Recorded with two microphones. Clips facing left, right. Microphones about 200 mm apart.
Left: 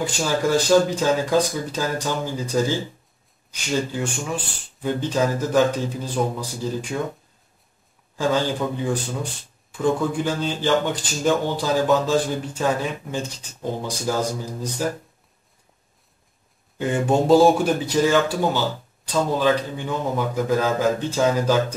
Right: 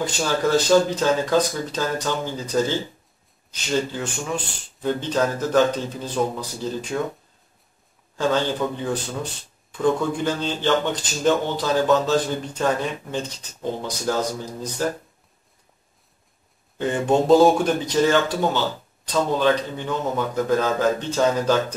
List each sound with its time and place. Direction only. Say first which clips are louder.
0.0 s speech: even; 10° left (ahead or behind)
8.2 s speech: even; 10° left (ahead or behind)
16.7 s speech: even; 10° left (ahead or behind)